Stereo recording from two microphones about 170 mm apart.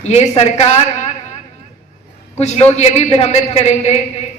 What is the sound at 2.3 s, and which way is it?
A woman's voice, 40° left (ahead or behind).